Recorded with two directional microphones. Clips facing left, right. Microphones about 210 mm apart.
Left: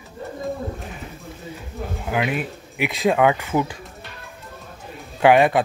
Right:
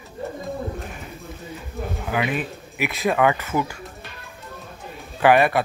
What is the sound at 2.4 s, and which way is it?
Speech, 15° left (ahead or behind).